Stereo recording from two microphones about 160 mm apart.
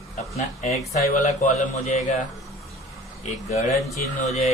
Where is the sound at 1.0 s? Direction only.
50° left (ahead or behind).